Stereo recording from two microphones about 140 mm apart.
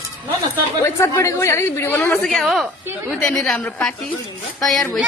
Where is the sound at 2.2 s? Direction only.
5° left (ahead or behind).